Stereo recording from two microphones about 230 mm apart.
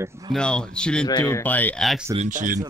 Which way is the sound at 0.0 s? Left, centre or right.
Centre.